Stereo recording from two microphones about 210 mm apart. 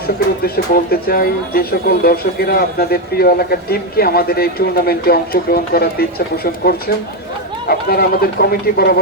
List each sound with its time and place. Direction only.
0.4 s a man's voice: 45° left (ahead or behind)